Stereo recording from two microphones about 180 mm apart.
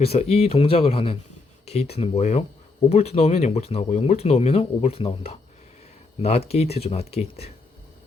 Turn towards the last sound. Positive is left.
turn(degrees=35)  # may be behind; listen again after turning